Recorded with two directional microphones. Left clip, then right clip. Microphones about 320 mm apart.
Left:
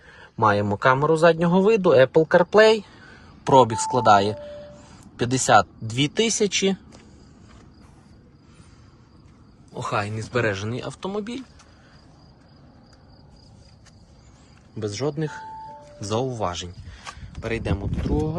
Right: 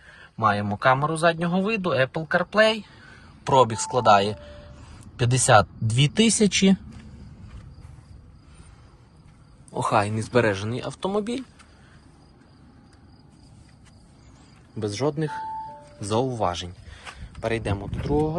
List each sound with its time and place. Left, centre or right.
0.1 s a man's voice: centre
9.7 s speech: centre
14.8 s speech: centre